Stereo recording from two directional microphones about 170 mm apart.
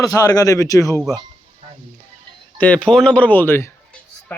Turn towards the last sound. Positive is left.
turn(degrees=10)  # may be behind; listen again after turning